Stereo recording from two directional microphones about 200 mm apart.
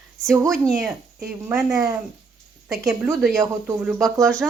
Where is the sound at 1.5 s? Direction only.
15° right (ahead or behind).